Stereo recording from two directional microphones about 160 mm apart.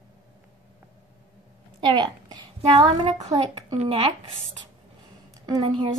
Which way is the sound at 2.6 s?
40° right (ahead or behind).